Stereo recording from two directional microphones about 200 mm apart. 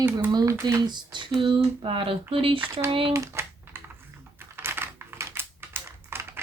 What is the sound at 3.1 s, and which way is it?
Typing, 15° right (ahead or behind).